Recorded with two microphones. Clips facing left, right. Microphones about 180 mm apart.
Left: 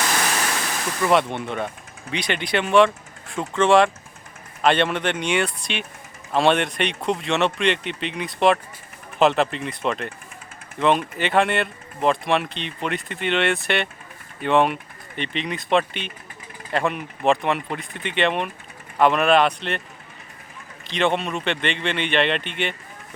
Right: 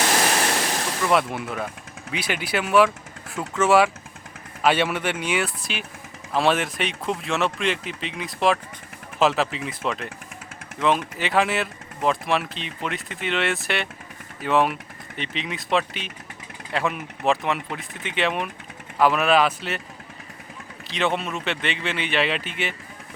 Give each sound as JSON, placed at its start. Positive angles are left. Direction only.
{"t": 1.0, "sound": "speech", "side_deg": 0}
{"t": 20.8, "sound": "speech", "side_deg": 0}